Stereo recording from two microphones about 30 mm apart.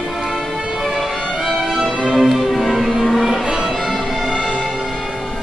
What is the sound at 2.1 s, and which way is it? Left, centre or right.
Music, centre.